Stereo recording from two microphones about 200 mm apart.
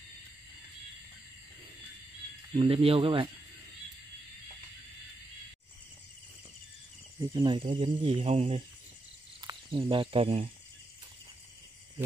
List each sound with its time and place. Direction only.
2.5 s speech: 30° right (ahead or behind)
7.2 s speech: 20° right (ahead or behind)